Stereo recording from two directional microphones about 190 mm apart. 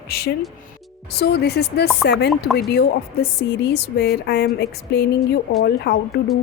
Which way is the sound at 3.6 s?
60° left (ahead or behind).